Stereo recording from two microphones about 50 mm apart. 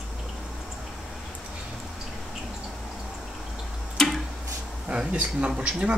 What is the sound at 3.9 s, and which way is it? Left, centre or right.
Tick-tock, centre.